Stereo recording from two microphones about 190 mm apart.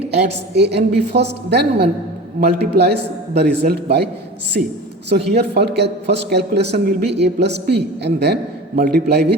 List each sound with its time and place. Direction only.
0.1 s a man's voice: 65° right (ahead or behind)
8.7 s a man's voice: 50° right (ahead or behind)